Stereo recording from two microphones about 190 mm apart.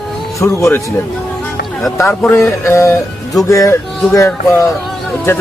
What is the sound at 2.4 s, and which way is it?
Speech, 15° left (ahead or behind).